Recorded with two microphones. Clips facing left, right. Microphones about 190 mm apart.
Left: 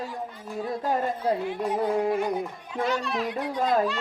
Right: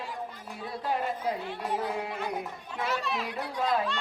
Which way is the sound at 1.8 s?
45° left (ahead or behind).